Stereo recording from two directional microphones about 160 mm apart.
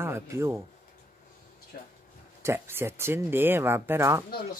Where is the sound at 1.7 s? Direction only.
60° left (ahead or behind).